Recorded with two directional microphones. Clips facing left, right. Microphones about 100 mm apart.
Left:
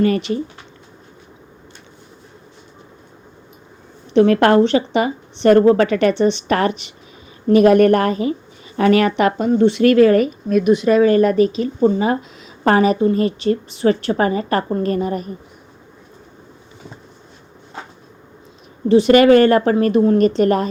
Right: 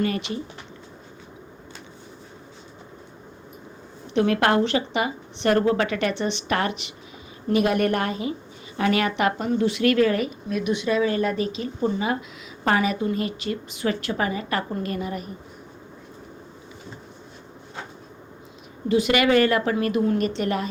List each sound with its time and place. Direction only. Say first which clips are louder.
0.0 s a woman's voice: left 8 dB; 35° left (ahead or behind)
4.1 s a woman's voice: left 8 dB; 35° left (ahead or behind)
11.4 s a woman's voice: left 9 dB; 35° left (ahead or behind)
18.9 s a woman's voice: left 9 dB; 35° left (ahead or behind)